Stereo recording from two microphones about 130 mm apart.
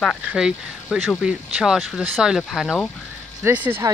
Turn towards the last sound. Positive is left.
turn(degrees=-15)  # may be behind; listen again after turning